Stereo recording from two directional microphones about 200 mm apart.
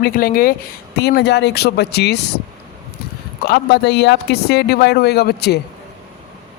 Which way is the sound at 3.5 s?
60° left (ahead or behind).